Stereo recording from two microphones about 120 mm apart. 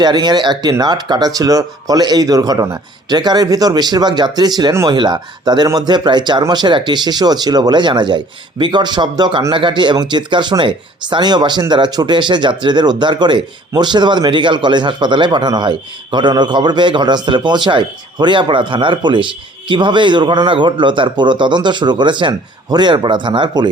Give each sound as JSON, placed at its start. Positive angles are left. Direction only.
{"t": 0.0, "sound": "speech", "side_deg": -35}